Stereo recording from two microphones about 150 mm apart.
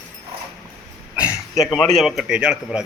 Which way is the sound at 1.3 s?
25° left (ahead or behind).